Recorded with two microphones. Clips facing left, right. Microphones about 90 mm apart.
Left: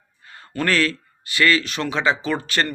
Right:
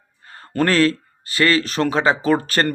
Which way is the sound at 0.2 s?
40° right (ahead or behind).